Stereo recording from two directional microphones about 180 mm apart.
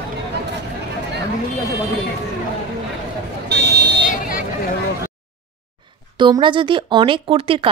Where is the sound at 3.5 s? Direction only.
65° right (ahead or behind).